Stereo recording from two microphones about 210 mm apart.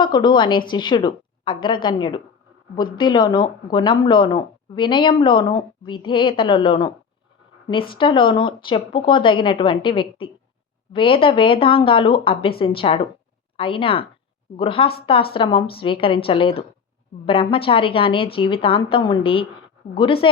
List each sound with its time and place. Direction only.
0.0 s speech: 20° left (ahead or behind)
7.9 s speech: 25° left (ahead or behind)